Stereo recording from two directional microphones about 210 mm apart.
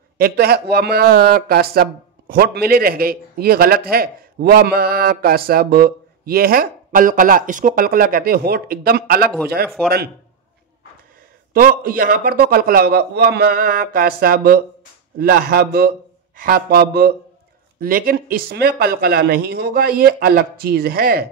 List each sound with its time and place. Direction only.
0.2 s speech: 50° right (ahead or behind)
11.5 s speech: 45° right (ahead or behind)